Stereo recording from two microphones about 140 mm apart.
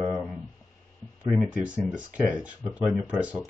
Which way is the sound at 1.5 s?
10° right (ahead or behind).